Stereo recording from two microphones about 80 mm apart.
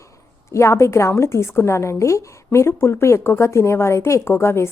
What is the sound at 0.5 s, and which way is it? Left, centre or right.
A woman's voice, left.